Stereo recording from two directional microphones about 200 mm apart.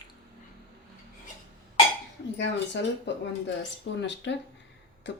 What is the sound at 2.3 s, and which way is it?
Speech, 60° left (ahead or behind).